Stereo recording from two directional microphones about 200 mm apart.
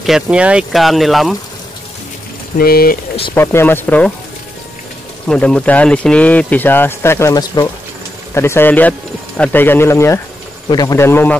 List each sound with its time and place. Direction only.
0.0 s speech: 5° right (ahead or behind)
2.5 s speech: 50° left (ahead or behind)
3.3 s speech: 10° left (ahead or behind)
5.3 s speech: 5° left (ahead or behind)